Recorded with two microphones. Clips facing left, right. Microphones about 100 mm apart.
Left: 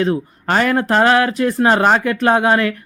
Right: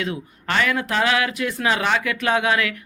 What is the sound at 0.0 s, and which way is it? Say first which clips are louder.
Speech: left 9 dB; 35° left (ahead or behind).